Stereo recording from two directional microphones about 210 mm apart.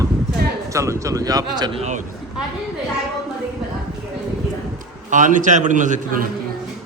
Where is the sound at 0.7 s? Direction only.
15° right (ahead or behind).